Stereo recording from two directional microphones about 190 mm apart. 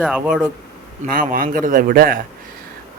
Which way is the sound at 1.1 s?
50° right (ahead or behind).